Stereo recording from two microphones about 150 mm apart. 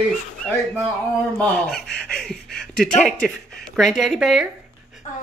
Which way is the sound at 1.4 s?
5° left (ahead or behind).